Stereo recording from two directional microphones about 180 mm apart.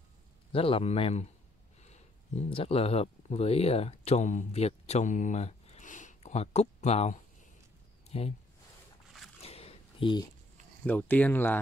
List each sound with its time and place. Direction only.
0.5 s a man's voice: 30° left (ahead or behind)
9.4 s a sound: 35° left (ahead or behind)
10.9 s speech: 10° left (ahead or behind)